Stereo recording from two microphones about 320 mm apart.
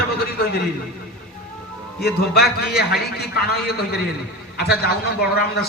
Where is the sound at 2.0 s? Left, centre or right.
Left.